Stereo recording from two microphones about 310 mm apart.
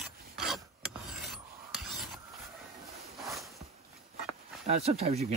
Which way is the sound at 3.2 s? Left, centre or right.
Centre.